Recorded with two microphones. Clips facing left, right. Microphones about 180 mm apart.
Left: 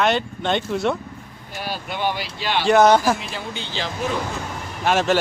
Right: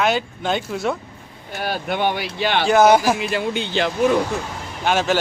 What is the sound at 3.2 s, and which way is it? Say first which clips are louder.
Speech: right 9 dB; 70° right (ahead or behind).